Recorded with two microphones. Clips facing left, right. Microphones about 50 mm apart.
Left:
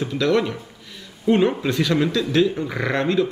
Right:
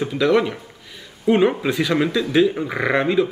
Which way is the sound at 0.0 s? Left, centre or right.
Centre.